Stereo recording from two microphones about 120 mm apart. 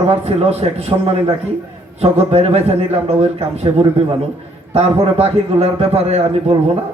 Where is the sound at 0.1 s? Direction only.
60° right (ahead or behind).